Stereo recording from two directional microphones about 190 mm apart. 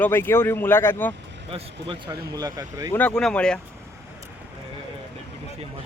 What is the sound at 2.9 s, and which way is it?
Speech, 10° left (ahead or behind).